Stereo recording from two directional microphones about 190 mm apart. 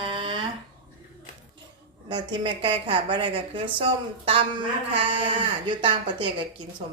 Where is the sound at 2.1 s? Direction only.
25° right (ahead or behind).